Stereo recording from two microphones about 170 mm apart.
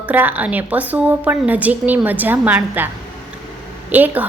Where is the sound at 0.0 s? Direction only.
10° right (ahead or behind).